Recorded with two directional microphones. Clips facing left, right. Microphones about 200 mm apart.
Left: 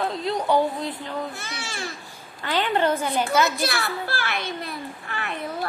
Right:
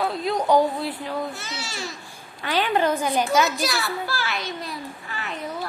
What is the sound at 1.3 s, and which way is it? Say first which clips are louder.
Speech: right 1 dB; 55° left (ahead or behind).